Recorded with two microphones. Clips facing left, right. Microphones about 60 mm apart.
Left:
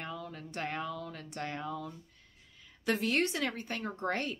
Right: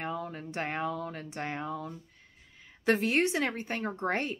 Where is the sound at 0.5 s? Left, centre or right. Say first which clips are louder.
Right 3 dB; right.